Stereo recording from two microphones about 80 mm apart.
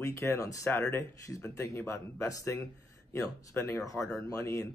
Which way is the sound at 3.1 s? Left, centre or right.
Left.